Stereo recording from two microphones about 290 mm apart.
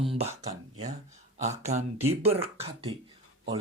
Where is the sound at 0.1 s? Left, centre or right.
Centre.